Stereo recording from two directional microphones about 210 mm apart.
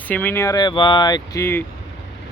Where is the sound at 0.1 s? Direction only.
10° left (ahead or behind).